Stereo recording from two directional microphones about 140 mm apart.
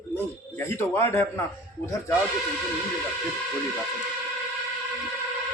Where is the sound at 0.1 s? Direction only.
20° left (ahead or behind).